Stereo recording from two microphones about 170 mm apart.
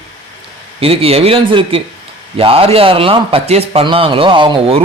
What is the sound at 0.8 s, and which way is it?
A man's voice, 35° right (ahead or behind).